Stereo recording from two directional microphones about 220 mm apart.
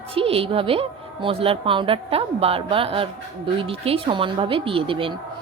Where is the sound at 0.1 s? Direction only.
25° right (ahead or behind).